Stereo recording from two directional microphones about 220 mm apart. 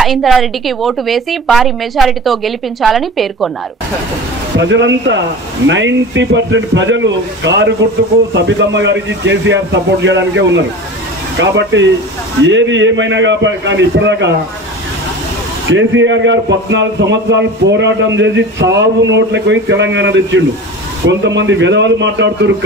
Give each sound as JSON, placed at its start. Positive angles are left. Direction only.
{"t": 0.0, "sound": "a woman's voice", "side_deg": 0}
{"t": 4.6, "sound": "a man's voice", "side_deg": -55}
{"t": 15.7, "sound": "a man's voice", "side_deg": -60}